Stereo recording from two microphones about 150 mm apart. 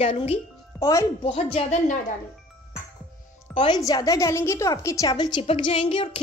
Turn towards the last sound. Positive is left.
turn(degrees=35)  # may be behind; listen again after turning